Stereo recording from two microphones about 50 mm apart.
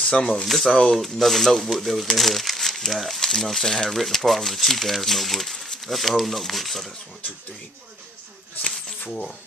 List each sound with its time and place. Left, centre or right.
0.0 s speech: centre
0.9 s speech: centre